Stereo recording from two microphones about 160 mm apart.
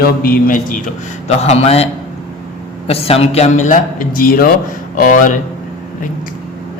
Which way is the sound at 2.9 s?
40° left (ahead or behind).